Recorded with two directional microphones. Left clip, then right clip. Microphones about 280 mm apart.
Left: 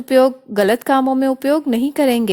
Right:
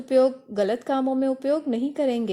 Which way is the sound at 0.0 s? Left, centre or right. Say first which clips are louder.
Left 6 dB; left.